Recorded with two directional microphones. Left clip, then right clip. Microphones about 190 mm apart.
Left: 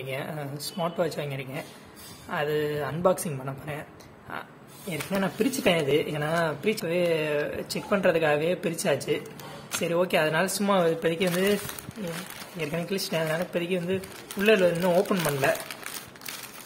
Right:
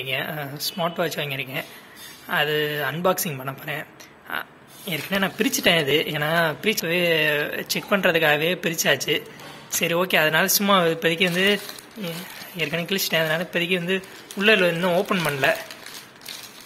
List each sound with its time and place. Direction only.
0.0 s speech: centre (ahead or behind)
12.5 s speech: centre (ahead or behind)